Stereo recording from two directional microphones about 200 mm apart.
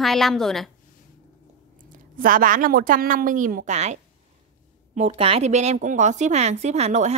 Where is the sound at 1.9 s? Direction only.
45° right (ahead or behind).